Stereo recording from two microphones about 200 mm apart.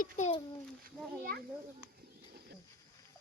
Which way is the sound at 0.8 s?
50° right (ahead or behind).